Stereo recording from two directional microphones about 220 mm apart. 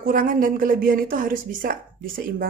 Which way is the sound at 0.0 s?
40° right (ahead or behind).